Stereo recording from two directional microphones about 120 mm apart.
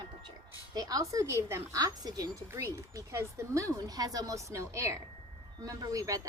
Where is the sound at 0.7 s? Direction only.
35° right (ahead or behind).